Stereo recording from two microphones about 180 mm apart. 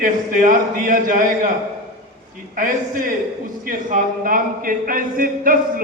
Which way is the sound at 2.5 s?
50° right (ahead or behind).